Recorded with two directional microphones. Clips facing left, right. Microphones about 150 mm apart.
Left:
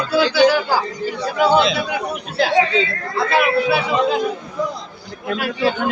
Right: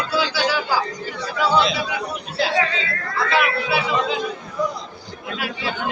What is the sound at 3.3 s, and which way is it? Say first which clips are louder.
Speech: left 5 dB; 45° left (ahead or behind).